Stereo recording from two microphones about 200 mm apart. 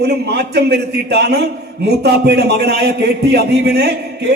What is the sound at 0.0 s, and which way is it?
A man's voice, 55° right (ahead or behind).